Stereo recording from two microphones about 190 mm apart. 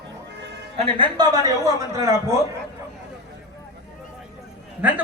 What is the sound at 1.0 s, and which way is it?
A man's voice, 20° right (ahead or behind).